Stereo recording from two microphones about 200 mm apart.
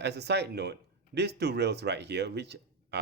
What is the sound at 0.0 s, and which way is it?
Speech, 55° right (ahead or behind).